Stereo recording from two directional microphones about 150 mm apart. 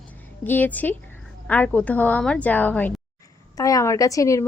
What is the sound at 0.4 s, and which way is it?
A woman's voice, 10° left (ahead or behind).